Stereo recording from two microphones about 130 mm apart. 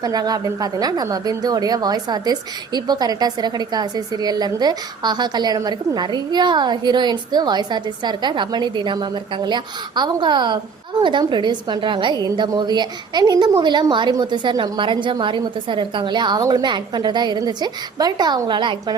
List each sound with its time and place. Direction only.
0.0 s a woman's voice: 30° right (ahead or behind)